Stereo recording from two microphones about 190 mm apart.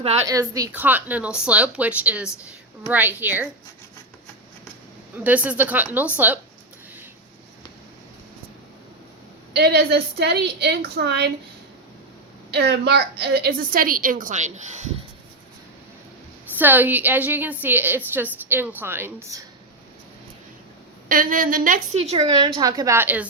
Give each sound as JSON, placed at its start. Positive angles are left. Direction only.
{"t": 0.3, "sound": "a woman's voice", "side_deg": -20}
{"t": 5.1, "sound": "a woman's voice", "side_deg": -10}
{"t": 9.6, "sound": "a woman's voice", "side_deg": -60}
{"t": 12.5, "sound": "a woman's voice", "side_deg": -60}
{"t": 16.6, "sound": "a woman's voice", "side_deg": -10}
{"t": 21.1, "sound": "a woman's voice", "side_deg": -45}
{"t": 21.9, "sound": "a woman's voice", "side_deg": -30}
{"t": 22.2, "sound": "a woman's voice", "side_deg": -20}